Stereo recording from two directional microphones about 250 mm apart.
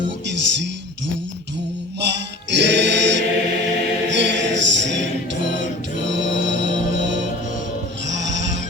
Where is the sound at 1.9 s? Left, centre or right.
Right.